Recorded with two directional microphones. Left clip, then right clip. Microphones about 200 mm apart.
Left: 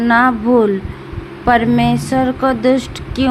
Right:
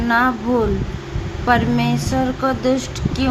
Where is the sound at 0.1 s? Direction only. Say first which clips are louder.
Left 5 dB; 25° left (ahead or behind).